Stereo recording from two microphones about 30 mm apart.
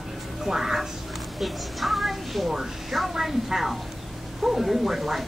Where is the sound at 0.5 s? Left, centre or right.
Centre.